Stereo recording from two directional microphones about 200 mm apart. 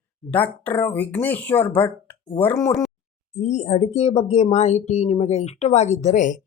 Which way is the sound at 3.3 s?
35° left (ahead or behind).